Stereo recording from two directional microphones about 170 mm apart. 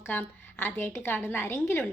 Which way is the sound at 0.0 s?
10° left (ahead or behind).